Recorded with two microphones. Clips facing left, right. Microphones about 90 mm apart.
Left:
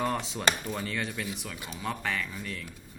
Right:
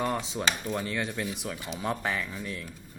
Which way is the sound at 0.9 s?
20° right (ahead or behind).